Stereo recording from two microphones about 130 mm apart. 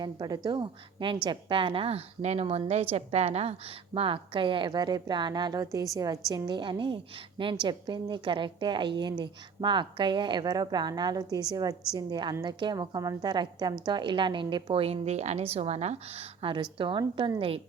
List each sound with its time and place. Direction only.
0.0 s a woman's voice: 30° right (ahead or behind)